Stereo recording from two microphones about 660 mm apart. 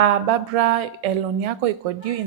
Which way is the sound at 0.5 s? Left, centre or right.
Right.